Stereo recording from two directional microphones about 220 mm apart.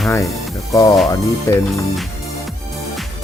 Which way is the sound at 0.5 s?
15° left (ahead or behind).